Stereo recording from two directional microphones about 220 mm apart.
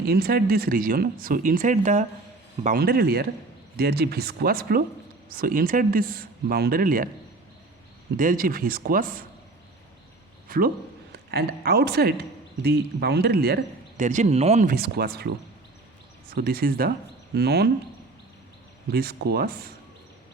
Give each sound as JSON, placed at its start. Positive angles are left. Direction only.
{"t": 0.0, "sound": "speech", "side_deg": -45}
{"t": 8.1, "sound": "speech", "side_deg": -40}
{"t": 10.5, "sound": "speech", "side_deg": -40}
{"t": 16.3, "sound": "speech", "side_deg": -45}
{"t": 18.9, "sound": "speech", "side_deg": -45}